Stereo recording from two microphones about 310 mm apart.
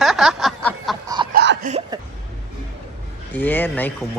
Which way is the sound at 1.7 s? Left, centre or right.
Centre.